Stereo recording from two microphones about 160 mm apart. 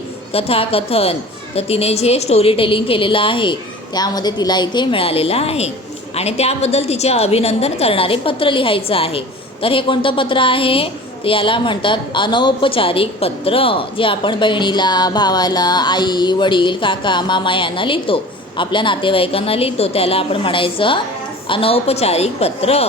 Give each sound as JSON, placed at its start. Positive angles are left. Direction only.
{"t": 0.3, "sound": "a woman's voice", "side_deg": 35}